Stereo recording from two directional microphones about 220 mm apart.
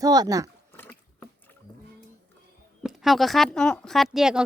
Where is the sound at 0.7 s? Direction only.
10° left (ahead or behind).